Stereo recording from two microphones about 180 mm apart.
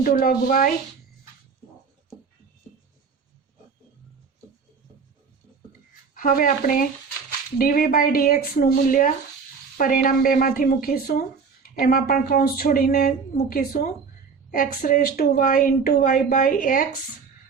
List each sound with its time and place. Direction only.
0.0 s speech: 55° left (ahead or behind)
6.1 s speech: 50° left (ahead or behind)